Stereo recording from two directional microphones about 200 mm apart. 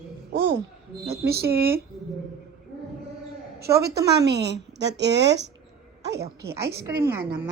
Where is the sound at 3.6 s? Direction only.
55° right (ahead or behind).